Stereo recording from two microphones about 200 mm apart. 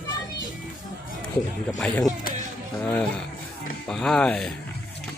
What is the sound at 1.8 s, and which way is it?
Speech, 5° left (ahead or behind).